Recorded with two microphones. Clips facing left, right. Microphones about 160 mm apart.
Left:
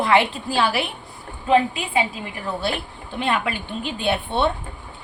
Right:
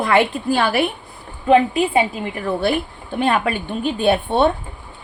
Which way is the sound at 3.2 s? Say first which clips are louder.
Right 5 dB; 50° right (ahead or behind).